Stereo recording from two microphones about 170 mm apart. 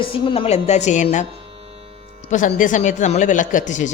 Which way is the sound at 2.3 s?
50° left (ahead or behind).